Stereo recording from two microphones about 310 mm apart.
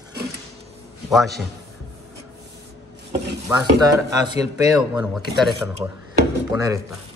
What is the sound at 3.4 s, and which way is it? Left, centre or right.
Speech, centre.